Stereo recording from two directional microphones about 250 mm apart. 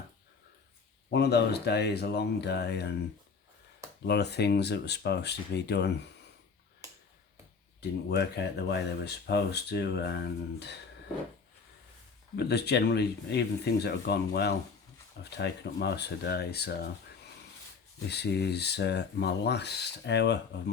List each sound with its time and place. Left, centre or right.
1.1 s speech: left
4.0 s speech: left
7.8 s speech: left
12.4 s speech: left
18.1 s speech: left